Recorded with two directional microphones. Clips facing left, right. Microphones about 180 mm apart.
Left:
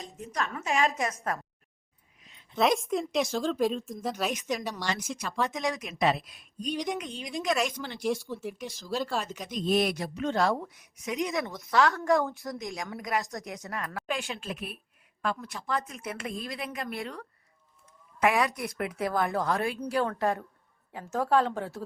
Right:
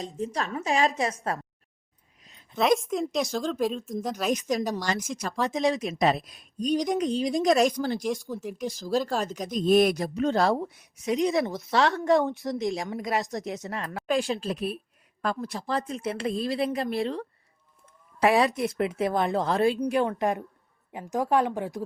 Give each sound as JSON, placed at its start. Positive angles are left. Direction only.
{"t": 0.0, "sound": "a woman's voice", "side_deg": -30}
{"t": 2.2, "sound": "a sound", "side_deg": -40}
{"t": 2.6, "sound": "speech", "side_deg": 0}
{"t": 4.3, "sound": "a woman's voice", "side_deg": -35}
{"t": 8.3, "sound": "speech", "side_deg": 0}
{"t": 8.5, "sound": "a woman's voice", "side_deg": -35}
{"t": 11.8, "sound": "a woman's voice", "side_deg": -20}
{"t": 12.6, "sound": "a woman's voice", "side_deg": -35}
{"t": 19.8, "sound": "a woman's voice", "side_deg": -15}